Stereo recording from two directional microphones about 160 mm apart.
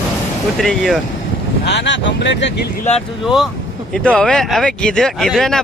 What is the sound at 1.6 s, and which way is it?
Speech, 90° left.